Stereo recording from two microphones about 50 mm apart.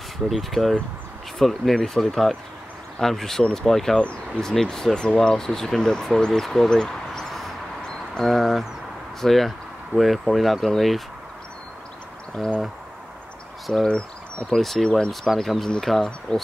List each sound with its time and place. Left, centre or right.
0.3 s speech: centre
7.8 s a sound: centre
8.3 s speech: centre
12.4 s speech: centre
13.8 s speech: left
14.5 s speech: centre
16.3 s speech: centre